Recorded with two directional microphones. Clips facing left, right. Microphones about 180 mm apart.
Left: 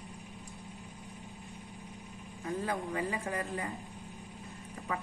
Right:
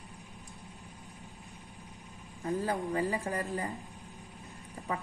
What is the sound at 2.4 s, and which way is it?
A woman's voice, 35° right (ahead or behind).